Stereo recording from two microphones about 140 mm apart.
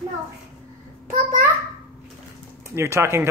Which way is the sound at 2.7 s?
20° right (ahead or behind).